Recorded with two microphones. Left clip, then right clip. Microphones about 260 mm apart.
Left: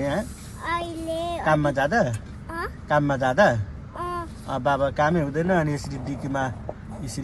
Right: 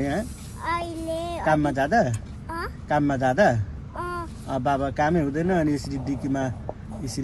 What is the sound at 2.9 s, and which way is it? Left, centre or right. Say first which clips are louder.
Speech: left 1 dB; left.